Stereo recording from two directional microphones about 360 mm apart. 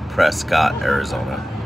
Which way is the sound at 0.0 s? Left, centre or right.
Centre.